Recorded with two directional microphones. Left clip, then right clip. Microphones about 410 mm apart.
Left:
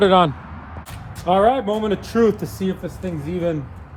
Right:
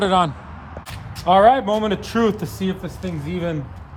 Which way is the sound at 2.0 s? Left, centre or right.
Centre.